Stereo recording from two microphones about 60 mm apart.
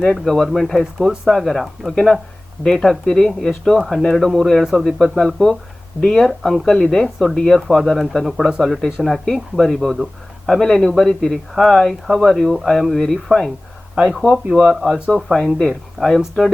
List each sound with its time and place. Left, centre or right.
0.0 s a man's voice: centre
0.9 s speech: centre
1.3 s a man's voice: centre
3.1 s a man's voice: centre
14.5 s speech: right
15.3 s a man's voice: centre